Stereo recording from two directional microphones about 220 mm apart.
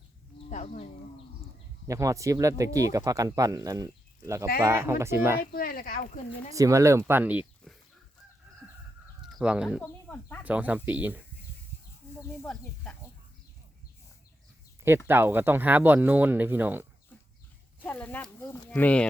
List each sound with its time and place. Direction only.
0.5 s speech: 30° left (ahead or behind)
1.9 s speech: 15° right (ahead or behind)
5.4 s speech: 40° left (ahead or behind)
6.5 s speech: 15° right (ahead or behind)
9.2 s speech: 5° right (ahead or behind)
9.8 s a sound: 10° left (ahead or behind)
10.4 s speech: 5° right (ahead or behind)
12.5 s speech: 5° left (ahead or behind)
14.8 s speech: 10° right (ahead or behind)
17.8 s speech: 10° left (ahead or behind)